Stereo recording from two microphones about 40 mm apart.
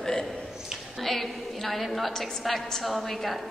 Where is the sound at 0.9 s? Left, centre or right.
Centre.